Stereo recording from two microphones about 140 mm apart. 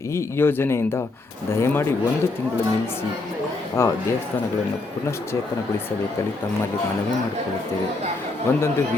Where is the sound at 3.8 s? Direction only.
20° left (ahead or behind).